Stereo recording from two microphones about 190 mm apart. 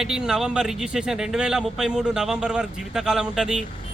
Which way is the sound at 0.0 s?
5° right (ahead or behind).